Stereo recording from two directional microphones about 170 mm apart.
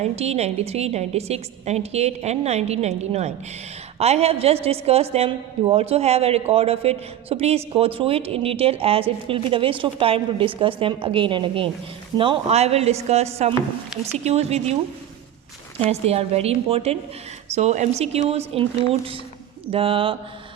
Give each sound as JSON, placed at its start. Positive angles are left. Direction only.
{"t": 0.0, "sound": "a woman's voice", "side_deg": -40}
{"t": 15.9, "sound": "a woman's voice", "side_deg": -40}